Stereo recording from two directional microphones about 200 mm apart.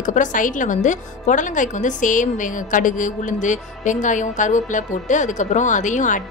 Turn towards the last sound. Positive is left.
turn(degrees=40)  # may be behind; listen again after turning